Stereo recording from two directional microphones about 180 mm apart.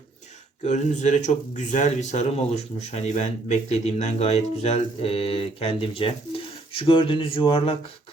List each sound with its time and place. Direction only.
0.6 s speech: 40° left (ahead or behind)